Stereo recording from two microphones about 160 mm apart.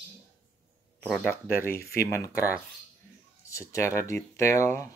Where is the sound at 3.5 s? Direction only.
20° left (ahead or behind).